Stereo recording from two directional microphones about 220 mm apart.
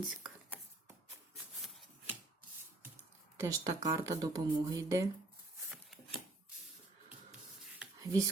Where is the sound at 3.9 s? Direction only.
15° right (ahead or behind).